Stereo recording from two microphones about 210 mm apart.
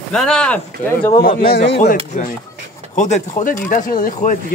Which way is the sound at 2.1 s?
35° left (ahead or behind).